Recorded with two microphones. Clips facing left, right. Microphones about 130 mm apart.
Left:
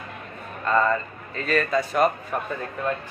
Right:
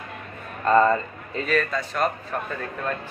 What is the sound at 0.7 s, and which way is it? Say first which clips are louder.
Speech: right 4 dB; 30° right (ahead or behind).